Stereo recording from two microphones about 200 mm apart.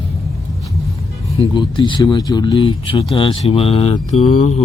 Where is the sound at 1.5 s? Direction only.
25° left (ahead or behind).